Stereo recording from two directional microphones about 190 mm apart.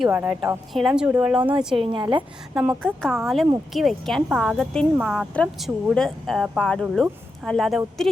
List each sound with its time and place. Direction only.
0.0 s a woman's voice: 10° right (ahead or behind)
1.8 s a woman's voice: 25° right (ahead or behind)
2.6 s a woman's voice: centre (ahead or behind)